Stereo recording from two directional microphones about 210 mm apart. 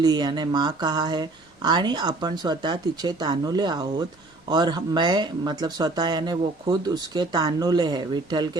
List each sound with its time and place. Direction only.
0.0 s speech: 20° right (ahead or behind)